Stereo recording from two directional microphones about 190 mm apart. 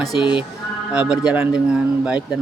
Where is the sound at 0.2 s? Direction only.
25° left (ahead or behind).